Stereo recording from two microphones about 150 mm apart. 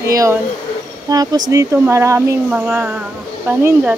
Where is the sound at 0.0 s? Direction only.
20° right (ahead or behind).